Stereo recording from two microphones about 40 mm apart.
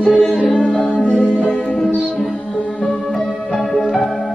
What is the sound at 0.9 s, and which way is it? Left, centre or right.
Music, left.